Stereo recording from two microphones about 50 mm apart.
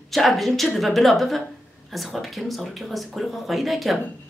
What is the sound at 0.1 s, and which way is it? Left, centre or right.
Speech, centre.